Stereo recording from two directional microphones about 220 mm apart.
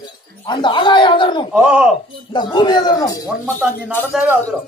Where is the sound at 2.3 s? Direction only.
20° left (ahead or behind).